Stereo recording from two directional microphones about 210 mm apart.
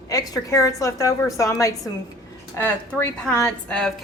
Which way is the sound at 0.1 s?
15° left (ahead or behind).